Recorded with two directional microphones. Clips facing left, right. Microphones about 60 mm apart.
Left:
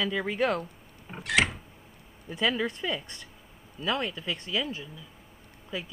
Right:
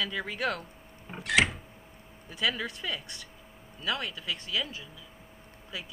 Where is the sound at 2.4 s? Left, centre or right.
Left.